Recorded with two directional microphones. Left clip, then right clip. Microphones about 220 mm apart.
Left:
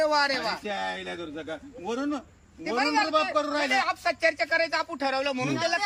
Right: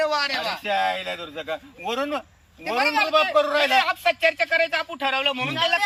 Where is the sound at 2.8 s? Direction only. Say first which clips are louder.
Right 4 dB; 15° left (ahead or behind).